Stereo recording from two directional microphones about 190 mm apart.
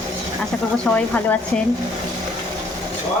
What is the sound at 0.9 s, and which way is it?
Speech, 10° left (ahead or behind).